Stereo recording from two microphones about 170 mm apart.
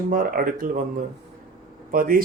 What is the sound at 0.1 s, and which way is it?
Speech, 55° right (ahead or behind).